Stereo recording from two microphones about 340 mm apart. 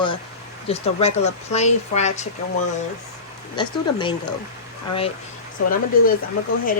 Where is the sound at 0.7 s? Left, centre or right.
Centre.